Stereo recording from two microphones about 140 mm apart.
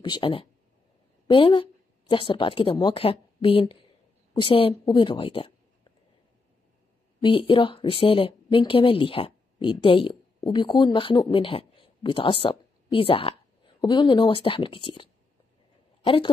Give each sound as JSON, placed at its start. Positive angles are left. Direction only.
{"t": 0.0, "sound": "a woman's voice", "side_deg": 35}
{"t": 7.2, "sound": "a woman's voice", "side_deg": 40}